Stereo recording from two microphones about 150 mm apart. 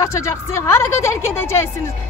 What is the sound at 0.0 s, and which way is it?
A woman's voice, 20° left (ahead or behind).